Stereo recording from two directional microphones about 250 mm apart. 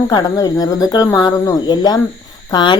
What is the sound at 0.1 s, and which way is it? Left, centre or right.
Speech, centre.